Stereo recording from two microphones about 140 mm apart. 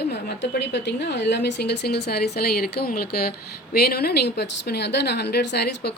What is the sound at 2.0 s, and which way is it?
Speech, 90° left.